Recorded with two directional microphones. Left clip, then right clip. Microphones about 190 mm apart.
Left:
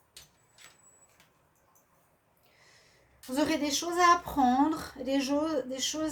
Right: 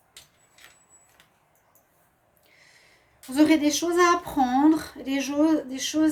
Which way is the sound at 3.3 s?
45° right (ahead or behind).